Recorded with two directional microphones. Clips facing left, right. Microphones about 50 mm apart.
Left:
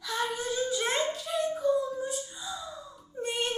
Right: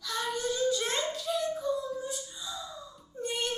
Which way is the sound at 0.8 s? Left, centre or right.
Left.